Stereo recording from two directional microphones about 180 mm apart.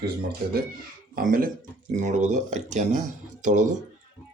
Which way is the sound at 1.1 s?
50° right (ahead or behind).